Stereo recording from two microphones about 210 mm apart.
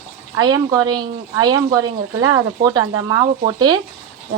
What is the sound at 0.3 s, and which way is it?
Speech, 20° right (ahead or behind).